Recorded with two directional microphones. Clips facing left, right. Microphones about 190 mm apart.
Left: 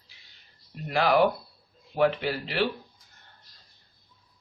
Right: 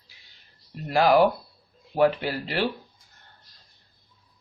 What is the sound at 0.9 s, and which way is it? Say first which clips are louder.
Speech: right 3 dB; 40° right (ahead or behind).